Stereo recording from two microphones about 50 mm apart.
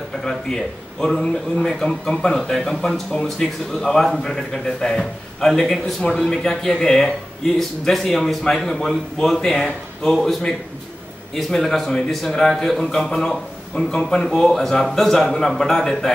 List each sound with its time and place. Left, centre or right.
1.2 s speech: centre
11.3 s speech: centre